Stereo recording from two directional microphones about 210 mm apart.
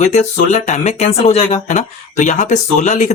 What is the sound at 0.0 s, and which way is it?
Speech, 35° left (ahead or behind).